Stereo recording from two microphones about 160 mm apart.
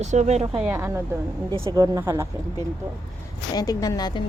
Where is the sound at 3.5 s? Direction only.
25° left (ahead or behind).